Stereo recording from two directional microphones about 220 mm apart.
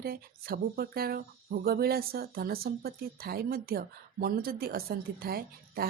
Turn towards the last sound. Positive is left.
turn(degrees=-45)  # may be behind; listen again after turning